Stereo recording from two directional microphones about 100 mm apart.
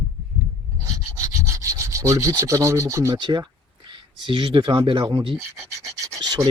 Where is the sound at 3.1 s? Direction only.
50° right (ahead or behind).